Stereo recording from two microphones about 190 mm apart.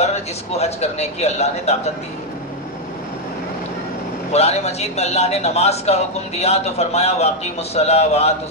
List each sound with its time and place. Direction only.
0.0 s a man's voice: 35° left (ahead or behind)
4.3 s a man's voice: 35° left (ahead or behind)